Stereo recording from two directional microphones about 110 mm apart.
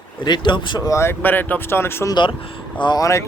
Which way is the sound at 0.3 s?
45° left (ahead or behind).